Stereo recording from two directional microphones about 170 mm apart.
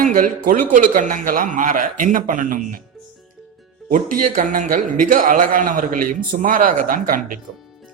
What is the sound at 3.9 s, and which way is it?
Speech, 50° right (ahead or behind).